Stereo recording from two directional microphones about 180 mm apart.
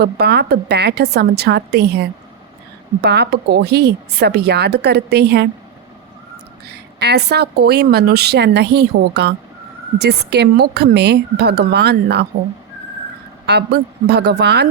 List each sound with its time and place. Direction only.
0.0 s speech: 65° right (ahead or behind)
7.0 s speech: 65° right (ahead or behind)
13.5 s a woman's voice: 65° right (ahead or behind)